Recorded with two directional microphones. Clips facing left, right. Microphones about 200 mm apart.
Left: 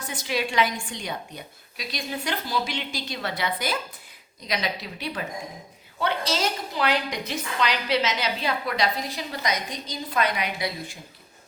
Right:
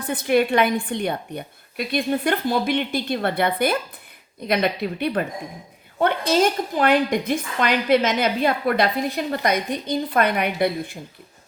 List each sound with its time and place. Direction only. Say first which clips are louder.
0.0 s a woman's voice: right 9 dB; 55° right (ahead or behind)